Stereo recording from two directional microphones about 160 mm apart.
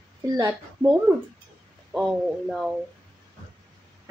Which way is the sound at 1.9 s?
Centre (ahead or behind).